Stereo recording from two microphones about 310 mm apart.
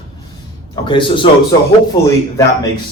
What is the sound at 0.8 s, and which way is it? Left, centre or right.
Speech, centre.